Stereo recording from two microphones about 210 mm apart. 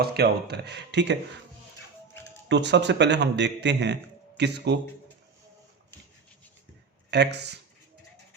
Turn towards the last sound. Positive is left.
turn(degrees=-55)  # may be behind; listen again after turning